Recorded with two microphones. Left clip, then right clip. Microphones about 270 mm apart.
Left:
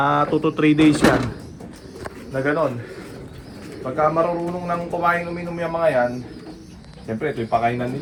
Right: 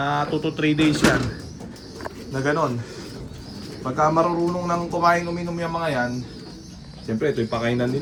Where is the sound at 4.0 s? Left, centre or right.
Centre.